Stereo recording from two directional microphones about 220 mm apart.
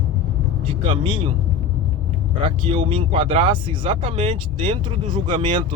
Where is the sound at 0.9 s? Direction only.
20° right (ahead or behind).